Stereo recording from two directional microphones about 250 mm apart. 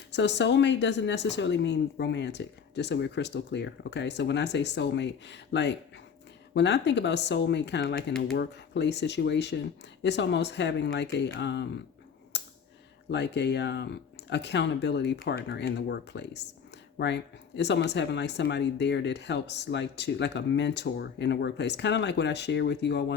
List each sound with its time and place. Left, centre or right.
0.1 s speech: left
12.3 s computer keyboard: left
13.1 s speech: left